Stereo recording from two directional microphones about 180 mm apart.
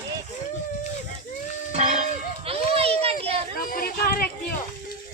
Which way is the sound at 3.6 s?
50° left (ahead or behind).